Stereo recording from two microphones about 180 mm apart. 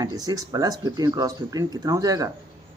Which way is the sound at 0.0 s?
20° right (ahead or behind).